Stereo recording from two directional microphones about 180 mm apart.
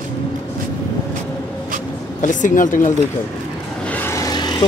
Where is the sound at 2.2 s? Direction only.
45° left (ahead or behind).